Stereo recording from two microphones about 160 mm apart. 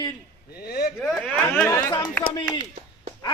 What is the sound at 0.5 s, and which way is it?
Speech, 75° left (ahead or behind).